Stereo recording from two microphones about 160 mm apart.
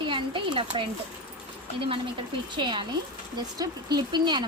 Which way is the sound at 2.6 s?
30° right (ahead or behind).